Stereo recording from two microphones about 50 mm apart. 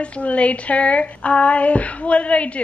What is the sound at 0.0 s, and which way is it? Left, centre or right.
A woman's voice, left.